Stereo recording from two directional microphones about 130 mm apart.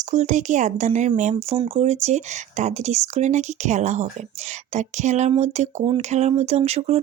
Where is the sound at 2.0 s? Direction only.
65° right (ahead or behind).